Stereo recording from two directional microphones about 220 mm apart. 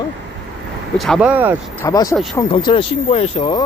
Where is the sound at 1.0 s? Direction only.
Centre (ahead or behind).